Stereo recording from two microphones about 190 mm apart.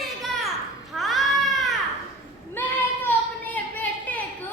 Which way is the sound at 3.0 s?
10° left (ahead or behind).